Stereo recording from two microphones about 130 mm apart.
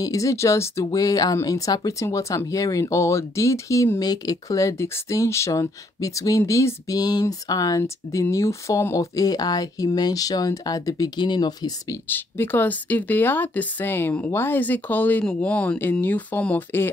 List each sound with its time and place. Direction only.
0.0 s speech: 25° left (ahead or behind)
12.1 s speech: 15° left (ahead or behind)